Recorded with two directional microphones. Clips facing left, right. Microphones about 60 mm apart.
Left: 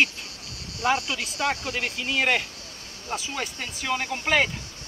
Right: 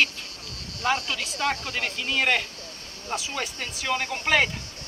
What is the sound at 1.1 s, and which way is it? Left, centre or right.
Speech, centre.